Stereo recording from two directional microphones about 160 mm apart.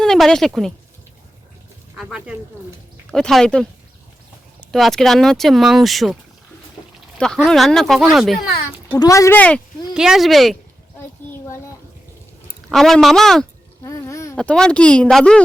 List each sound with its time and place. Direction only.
0.0 s a woman's voice: 5° left (ahead or behind)
2.0 s speech: 5° right (ahead or behind)
4.7 s speech: centre (ahead or behind)
7.2 s speech: 5° left (ahead or behind)
9.0 s speech: 20° left (ahead or behind)
9.9 s speech: 5° right (ahead or behind)
12.7 s speech: centre (ahead or behind)
13.8 s a sound: 20° left (ahead or behind)
14.3 s speech: 5° left (ahead or behind)